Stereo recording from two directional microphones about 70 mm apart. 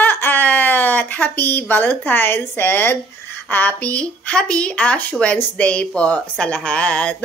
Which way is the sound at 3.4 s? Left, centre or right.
Left.